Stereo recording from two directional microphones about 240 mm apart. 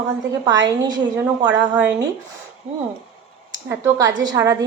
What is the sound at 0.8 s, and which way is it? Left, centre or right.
Speech, centre.